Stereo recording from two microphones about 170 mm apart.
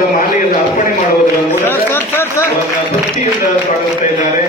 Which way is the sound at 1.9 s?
15° left (ahead or behind).